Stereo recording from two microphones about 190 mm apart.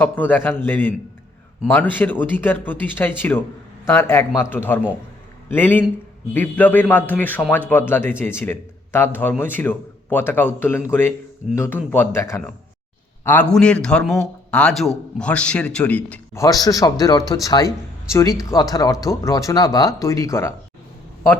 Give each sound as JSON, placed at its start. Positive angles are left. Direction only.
{"t": 0.0, "sound": "a man's voice", "side_deg": 10}